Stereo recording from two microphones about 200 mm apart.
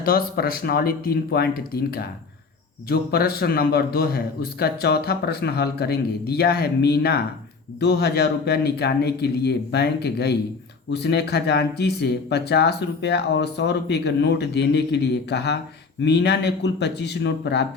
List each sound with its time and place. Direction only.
0.0 s speech: 50° left (ahead or behind)